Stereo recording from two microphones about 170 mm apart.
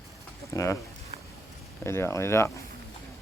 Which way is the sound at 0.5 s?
15° left (ahead or behind).